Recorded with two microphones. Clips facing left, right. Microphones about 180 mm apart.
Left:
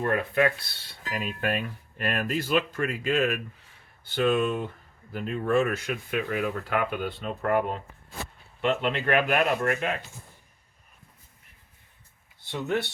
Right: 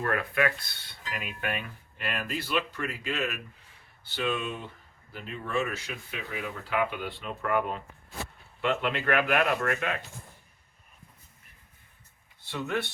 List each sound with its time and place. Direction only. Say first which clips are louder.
0.0 s speech: left 4 dB; 25° left (ahead or behind)
8.6 s speech: left 2 dB; 30° left (ahead or behind)